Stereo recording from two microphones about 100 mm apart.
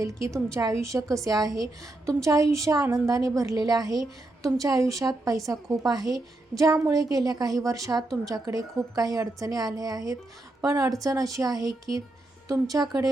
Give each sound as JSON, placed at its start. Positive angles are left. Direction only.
{"t": 0.0, "sound": "a woman's voice", "side_deg": -30}